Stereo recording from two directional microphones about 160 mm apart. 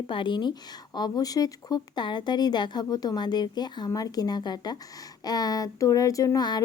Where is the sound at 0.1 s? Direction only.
30° left (ahead or behind).